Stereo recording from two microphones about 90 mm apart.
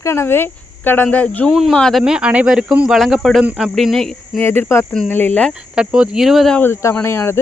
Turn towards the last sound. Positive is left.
turn(degrees=25)  # may be behind; listen again after turning